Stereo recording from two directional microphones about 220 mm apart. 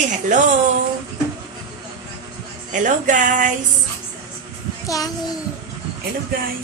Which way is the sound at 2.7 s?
35° right (ahead or behind).